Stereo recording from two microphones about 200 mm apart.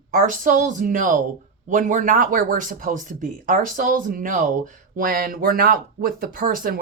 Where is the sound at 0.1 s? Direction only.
45° right (ahead or behind).